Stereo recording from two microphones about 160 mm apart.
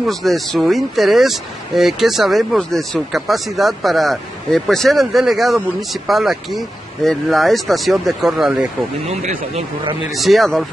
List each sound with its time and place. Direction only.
0.0 s speech: centre (ahead or behind)
9.2 s speech: 45° right (ahead or behind)
10.1 s speech: centre (ahead or behind)